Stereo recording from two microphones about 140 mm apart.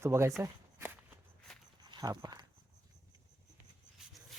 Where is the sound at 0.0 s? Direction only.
20° right (ahead or behind).